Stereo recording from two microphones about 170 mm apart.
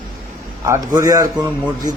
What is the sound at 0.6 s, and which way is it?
Speech, 20° right (ahead or behind).